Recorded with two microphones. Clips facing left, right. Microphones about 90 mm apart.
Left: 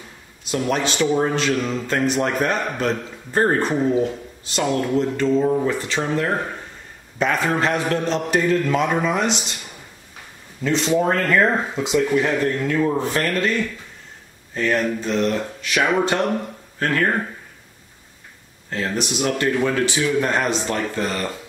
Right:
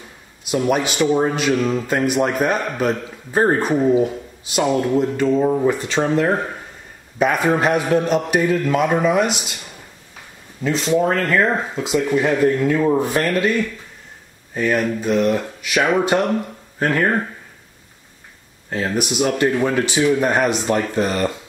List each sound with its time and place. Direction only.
0.5 s a man's voice: 10° right (ahead or behind)
7.2 s a man's voice: 10° right (ahead or behind)
10.6 s a man's voice: centre (ahead or behind); by 17.1 s 20° right (ahead or behind)
18.7 s a man's voice: 10° right (ahead or behind)